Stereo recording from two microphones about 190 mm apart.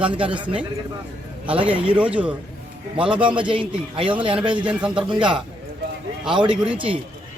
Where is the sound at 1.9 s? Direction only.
5° right (ahead or behind).